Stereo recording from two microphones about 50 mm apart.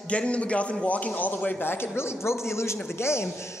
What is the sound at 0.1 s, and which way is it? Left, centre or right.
A man's voice, left.